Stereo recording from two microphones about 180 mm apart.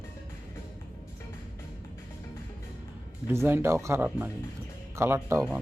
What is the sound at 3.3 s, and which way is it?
Speech, 15° right (ahead or behind).